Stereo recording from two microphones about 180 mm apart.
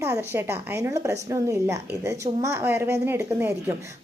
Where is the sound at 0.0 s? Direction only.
15° right (ahead or behind).